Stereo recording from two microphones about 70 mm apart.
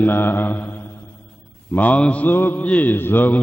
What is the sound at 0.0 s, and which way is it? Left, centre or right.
Mantra, left.